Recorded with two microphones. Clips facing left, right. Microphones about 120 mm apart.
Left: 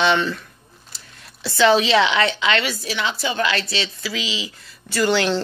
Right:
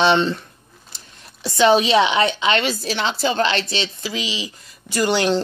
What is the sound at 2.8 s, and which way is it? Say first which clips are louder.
Speech: right 3 dB; 30° right (ahead or behind).